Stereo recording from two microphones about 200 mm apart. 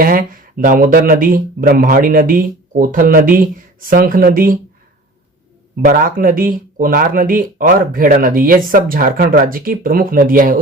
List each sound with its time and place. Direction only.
0.0 s speech: 45° right (ahead or behind)
5.8 s speech: 45° right (ahead or behind)